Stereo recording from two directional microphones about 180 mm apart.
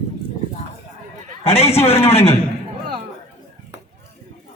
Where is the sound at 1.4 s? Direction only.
35° left (ahead or behind).